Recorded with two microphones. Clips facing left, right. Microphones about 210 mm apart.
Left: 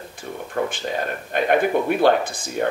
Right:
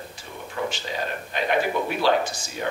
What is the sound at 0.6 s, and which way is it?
Speech, 50° left (ahead or behind).